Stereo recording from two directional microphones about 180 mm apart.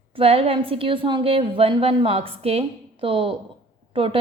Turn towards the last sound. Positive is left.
turn(degrees=-30)  # may be behind; listen again after turning